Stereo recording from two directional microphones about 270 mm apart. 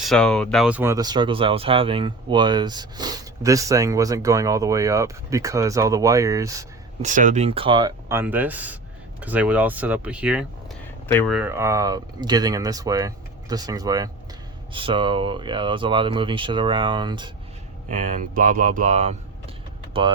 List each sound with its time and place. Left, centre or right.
0.0 s speech: centre
7.0 s speech: right
17.9 s speech: right